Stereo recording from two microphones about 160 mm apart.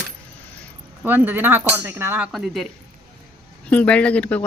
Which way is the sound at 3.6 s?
10° left (ahead or behind).